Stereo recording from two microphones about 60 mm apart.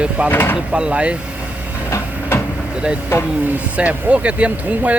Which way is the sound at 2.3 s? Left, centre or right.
Left.